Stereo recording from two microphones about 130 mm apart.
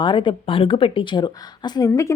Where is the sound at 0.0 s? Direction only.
35° left (ahead or behind).